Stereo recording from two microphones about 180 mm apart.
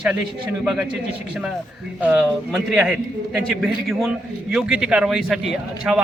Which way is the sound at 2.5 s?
Centre (ahead or behind).